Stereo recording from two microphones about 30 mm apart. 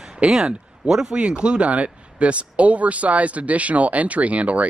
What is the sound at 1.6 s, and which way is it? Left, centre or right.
Speech, right.